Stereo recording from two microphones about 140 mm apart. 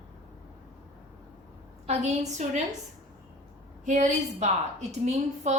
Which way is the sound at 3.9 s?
60° right (ahead or behind).